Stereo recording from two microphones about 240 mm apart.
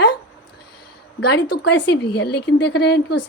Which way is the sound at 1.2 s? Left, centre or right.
Left.